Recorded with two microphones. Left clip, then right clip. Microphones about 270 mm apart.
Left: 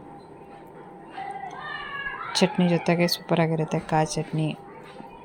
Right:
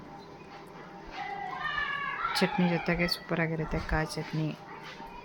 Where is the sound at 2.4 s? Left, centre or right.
Centre.